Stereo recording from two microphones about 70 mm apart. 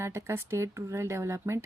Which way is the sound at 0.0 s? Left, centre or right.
Right.